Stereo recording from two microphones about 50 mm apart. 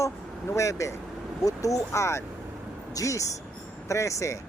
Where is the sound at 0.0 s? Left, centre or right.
Left.